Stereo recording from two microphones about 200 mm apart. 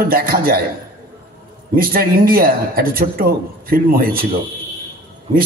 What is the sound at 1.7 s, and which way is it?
A man's voice, 50° right (ahead or behind).